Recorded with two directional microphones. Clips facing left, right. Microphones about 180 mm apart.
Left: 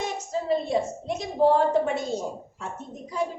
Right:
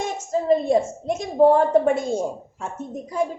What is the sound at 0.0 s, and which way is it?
A woman's voice, 50° right (ahead or behind).